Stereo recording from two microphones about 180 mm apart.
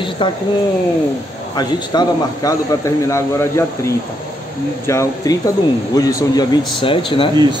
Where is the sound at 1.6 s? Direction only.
20° left (ahead or behind).